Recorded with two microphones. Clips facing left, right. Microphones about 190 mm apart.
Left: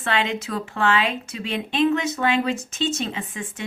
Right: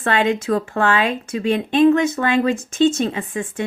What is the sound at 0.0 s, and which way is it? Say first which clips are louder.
Speech: right 6 dB; 50° right (ahead or behind).